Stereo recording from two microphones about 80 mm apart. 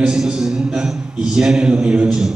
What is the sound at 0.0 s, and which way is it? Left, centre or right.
A man's voice, centre.